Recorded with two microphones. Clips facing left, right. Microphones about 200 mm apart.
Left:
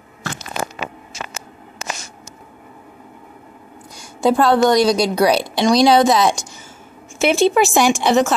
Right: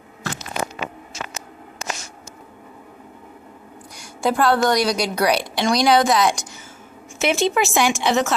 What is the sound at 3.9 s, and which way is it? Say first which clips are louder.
A woman's voice: left 5 dB; 25° left (ahead or behind).